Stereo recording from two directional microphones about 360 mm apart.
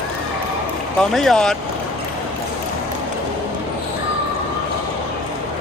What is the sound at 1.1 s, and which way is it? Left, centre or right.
Speech, centre.